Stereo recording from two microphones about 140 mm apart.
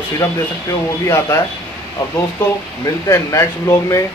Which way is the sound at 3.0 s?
20° left (ahead or behind).